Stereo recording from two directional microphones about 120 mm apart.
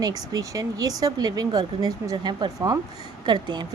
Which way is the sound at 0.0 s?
30° right (ahead or behind).